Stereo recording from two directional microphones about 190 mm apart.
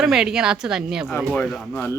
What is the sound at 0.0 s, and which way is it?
A woman's voice, 5° right (ahead or behind).